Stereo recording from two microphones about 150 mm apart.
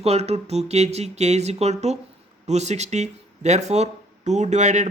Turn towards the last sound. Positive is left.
turn(degrees=-55)  # may be behind; listen again after turning